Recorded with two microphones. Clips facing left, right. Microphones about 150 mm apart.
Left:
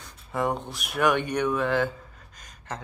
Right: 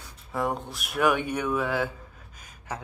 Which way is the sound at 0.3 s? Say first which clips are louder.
Left 2 dB; centre (ahead or behind).